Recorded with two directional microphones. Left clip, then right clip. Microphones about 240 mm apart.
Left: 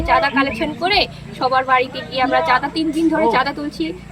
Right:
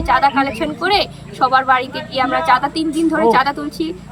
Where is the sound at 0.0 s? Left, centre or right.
Centre.